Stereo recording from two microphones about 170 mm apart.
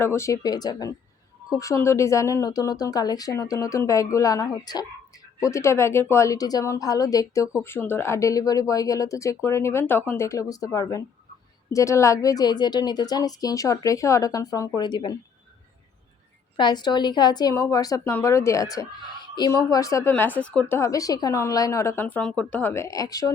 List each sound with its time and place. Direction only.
0.0 s speech: 15° left (ahead or behind)
16.6 s speech: 25° left (ahead or behind)